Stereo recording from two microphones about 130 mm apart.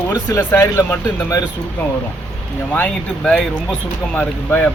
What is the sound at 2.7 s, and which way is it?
Speech, 10° left (ahead or behind).